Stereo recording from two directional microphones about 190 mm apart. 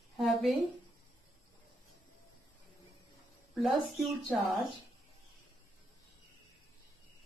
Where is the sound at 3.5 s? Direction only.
Centre (ahead or behind).